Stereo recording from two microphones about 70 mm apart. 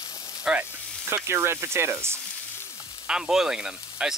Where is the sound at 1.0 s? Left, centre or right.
Right.